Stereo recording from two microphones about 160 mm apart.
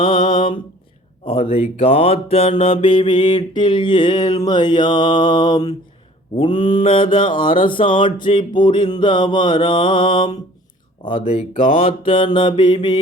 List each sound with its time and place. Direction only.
0.0 s mantra: 35° left (ahead or behind)
2.8 s a sound: 30° left (ahead or behind)
6.3 s mantra: 30° left (ahead or behind)
11.3 s mantra: 40° left (ahead or behind)